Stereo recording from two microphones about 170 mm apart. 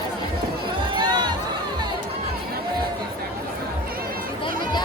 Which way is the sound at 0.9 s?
25° right (ahead or behind).